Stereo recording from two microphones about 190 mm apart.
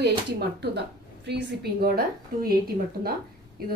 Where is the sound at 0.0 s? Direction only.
60° right (ahead or behind).